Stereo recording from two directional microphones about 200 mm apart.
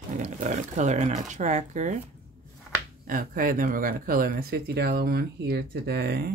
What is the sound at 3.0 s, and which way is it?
Speech, 45° right (ahead or behind).